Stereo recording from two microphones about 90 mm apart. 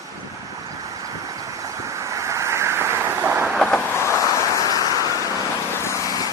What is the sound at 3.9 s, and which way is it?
Vehicle, 30° left (ahead or behind).